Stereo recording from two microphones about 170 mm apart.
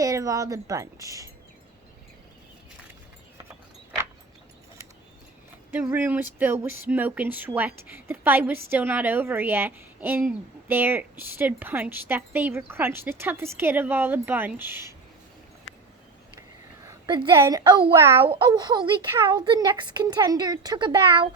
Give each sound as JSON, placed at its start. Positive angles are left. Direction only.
{"t": 0.0, "sound": "speech", "side_deg": -20}
{"t": 5.7, "sound": "speech", "side_deg": -10}
{"t": 16.8, "sound": "a sound", "side_deg": -20}
{"t": 17.3, "sound": "speech", "side_deg": -15}
{"t": 17.7, "sound": "speech", "side_deg": -25}
{"t": 18.2, "sound": "speech", "side_deg": -30}